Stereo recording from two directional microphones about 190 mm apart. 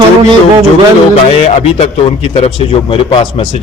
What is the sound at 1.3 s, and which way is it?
Speech, 35° left (ahead or behind).